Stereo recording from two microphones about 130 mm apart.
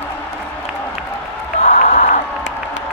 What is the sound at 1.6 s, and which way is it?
Crowd, 65° left (ahead or behind).